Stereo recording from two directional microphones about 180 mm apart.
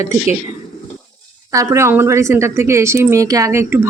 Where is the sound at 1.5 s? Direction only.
15° right (ahead or behind).